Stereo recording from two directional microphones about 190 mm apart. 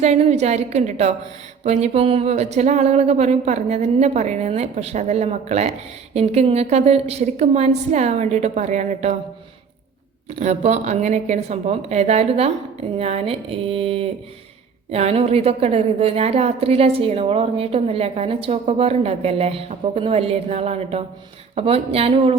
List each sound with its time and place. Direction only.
0.0 s a woman's voice: 35° right (ahead or behind)
10.2 s a woman's voice: 35° right (ahead or behind)